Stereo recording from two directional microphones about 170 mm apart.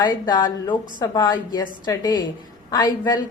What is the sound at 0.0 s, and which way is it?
A woman's voice, 25° left (ahead or behind).